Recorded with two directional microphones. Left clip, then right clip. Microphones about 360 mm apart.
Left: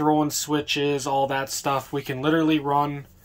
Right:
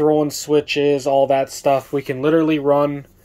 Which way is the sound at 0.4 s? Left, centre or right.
Left.